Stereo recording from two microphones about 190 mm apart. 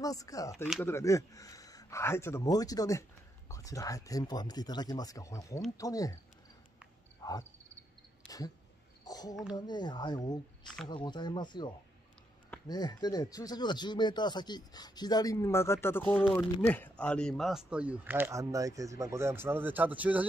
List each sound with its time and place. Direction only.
0.0 s speech: 20° left (ahead or behind)
7.2 s frog: 20° left (ahead or behind)
9.0 s speech: 20° left (ahead or behind); by 20.2 s 10° right (ahead or behind)